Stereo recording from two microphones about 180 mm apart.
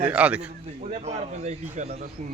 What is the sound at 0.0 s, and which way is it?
Speech, 10° right (ahead or behind).